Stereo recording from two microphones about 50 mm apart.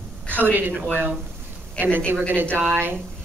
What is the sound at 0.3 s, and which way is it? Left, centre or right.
A woman's voice, right.